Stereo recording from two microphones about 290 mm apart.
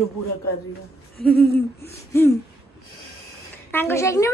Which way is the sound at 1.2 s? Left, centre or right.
Centre.